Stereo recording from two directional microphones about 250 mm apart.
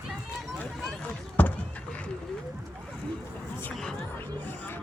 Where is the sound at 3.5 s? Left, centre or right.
Centre.